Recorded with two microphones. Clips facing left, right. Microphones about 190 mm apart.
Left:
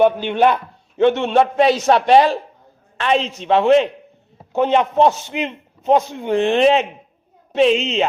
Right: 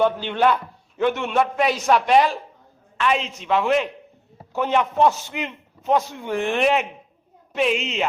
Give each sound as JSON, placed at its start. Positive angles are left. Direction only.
{"t": 0.0, "sound": "a man's voice", "side_deg": 20}